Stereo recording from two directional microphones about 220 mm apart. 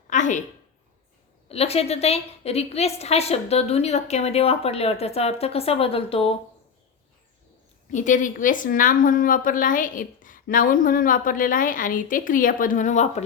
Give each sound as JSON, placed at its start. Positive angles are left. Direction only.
{"t": 0.1, "sound": "a sound", "side_deg": 35}
{"t": 1.5, "sound": "a woman's voice", "side_deg": 30}
{"t": 7.9, "sound": "a woman's voice", "side_deg": 35}